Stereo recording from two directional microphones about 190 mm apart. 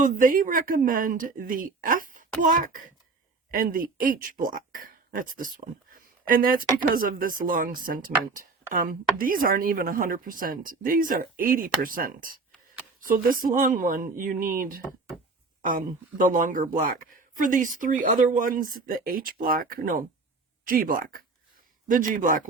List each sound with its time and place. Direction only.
0.0 s speech: 45° right (ahead or behind)